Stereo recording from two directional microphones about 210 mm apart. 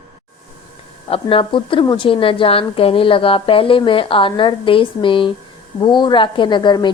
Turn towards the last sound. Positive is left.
turn(degrees=20)  # may be behind; listen again after turning